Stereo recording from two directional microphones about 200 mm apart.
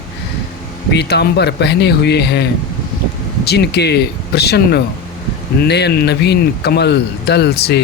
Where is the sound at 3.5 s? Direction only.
55° left (ahead or behind).